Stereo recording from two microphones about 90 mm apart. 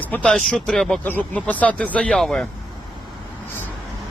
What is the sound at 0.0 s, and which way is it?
Speech, 20° left (ahead or behind).